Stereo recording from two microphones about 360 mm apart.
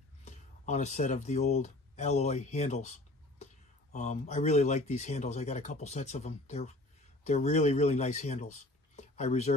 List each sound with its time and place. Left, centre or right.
0.2 s speech: centre